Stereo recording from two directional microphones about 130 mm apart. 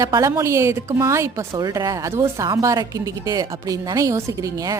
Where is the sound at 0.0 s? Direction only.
25° right (ahead or behind).